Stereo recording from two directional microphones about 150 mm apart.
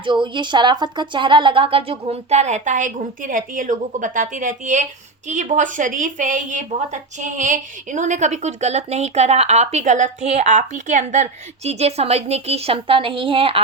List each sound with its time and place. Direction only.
0.0 s a woman's voice: 30° right (ahead or behind)